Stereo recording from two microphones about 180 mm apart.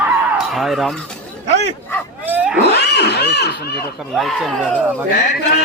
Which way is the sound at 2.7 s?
65° left (ahead or behind).